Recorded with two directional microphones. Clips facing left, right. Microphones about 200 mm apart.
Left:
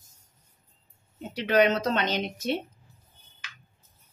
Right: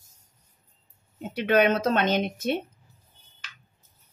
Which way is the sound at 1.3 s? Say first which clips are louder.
Right 1 dB; 55° right (ahead or behind).